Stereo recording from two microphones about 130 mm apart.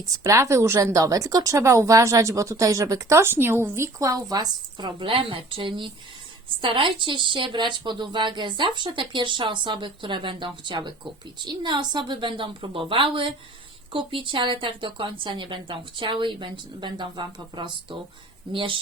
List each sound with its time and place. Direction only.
0.2 s a woman's voice: 25° right (ahead or behind); by 18.8 s 40° right (ahead or behind)